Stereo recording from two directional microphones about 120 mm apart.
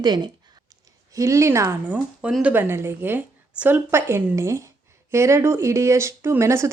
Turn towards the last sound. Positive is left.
turn(degrees=-25)  # may be behind; listen again after turning